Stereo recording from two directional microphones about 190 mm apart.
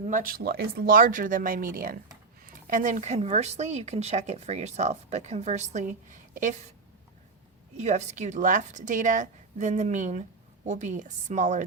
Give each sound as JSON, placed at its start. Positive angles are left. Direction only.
{"t": 0.1, "sound": "speech", "side_deg": -45}
{"t": 7.8, "sound": "speech", "side_deg": -35}